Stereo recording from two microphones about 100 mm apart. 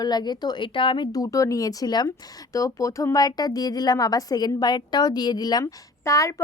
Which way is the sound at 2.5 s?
35° left (ahead or behind).